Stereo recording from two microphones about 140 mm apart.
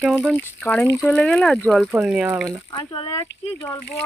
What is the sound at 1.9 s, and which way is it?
Speech, 5° right (ahead or behind).